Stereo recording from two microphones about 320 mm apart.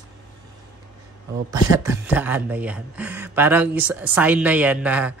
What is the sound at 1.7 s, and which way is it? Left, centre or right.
Speech, centre.